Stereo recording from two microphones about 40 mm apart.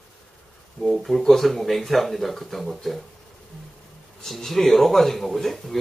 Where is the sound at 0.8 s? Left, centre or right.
Centre.